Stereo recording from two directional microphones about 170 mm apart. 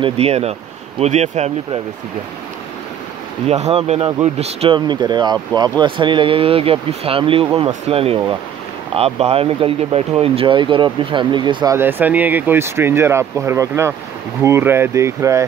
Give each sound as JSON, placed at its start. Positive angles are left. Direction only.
{"t": 0.0, "sound": "speech", "side_deg": -35}
{"t": 3.4, "sound": "speech", "side_deg": -40}